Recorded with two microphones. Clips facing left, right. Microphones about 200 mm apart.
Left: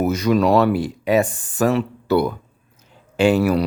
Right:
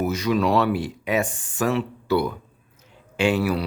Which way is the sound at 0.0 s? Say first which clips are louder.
Left 4 dB; 45° left (ahead or behind).